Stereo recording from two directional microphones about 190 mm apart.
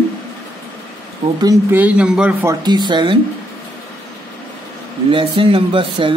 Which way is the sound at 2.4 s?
20° right (ahead or behind).